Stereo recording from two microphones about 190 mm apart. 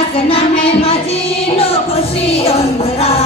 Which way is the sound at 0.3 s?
30° left (ahead or behind).